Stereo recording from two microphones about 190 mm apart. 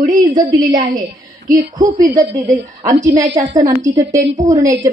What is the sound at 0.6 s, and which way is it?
Speech, 20° right (ahead or behind).